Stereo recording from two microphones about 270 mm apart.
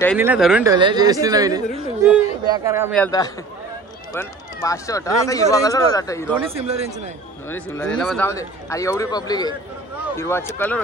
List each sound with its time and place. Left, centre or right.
0.2 s speech: centre
0.7 s speech: centre
2.9 s speech: centre
6.5 s speech: right
7.4 s speech: centre